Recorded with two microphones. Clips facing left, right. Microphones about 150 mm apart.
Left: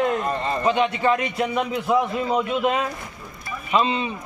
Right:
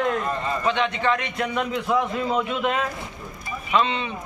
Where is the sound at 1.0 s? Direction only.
40° left (ahead or behind).